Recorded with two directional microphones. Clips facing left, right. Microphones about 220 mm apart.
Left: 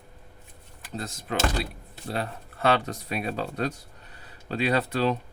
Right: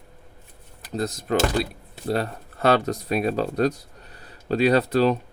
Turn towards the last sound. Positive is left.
turn(degrees=-40)  # may be behind; listen again after turning